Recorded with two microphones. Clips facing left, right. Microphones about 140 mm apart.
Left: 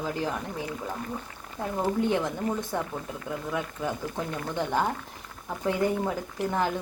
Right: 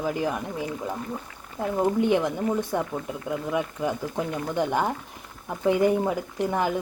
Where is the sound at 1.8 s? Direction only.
15° right (ahead or behind).